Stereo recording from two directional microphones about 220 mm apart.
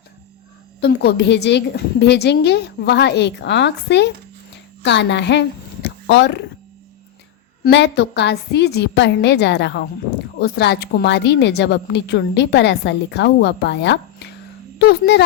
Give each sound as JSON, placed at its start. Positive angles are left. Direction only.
{"t": 0.8, "sound": "a woman's voice", "side_deg": 50}
{"t": 7.6, "sound": "a woman's voice", "side_deg": 50}